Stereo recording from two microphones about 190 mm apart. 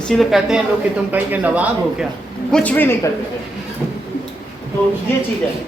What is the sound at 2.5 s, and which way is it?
Speech, 5° left (ahead or behind).